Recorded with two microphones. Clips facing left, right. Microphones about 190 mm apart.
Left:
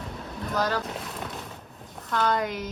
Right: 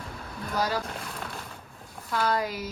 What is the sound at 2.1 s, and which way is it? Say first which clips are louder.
Speech: left 2 dB; 5° right (ahead or behind).